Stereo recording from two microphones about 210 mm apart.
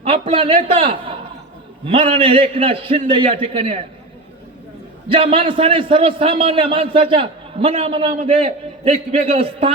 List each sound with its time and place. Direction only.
0.1 s a man's voice: 25° right (ahead or behind)
1.8 s a man's voice: 25° right (ahead or behind)
5.1 s a man's voice: 25° right (ahead or behind)